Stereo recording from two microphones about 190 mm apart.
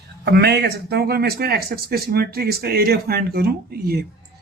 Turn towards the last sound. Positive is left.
turn(degrees=-55)  # may be behind; listen again after turning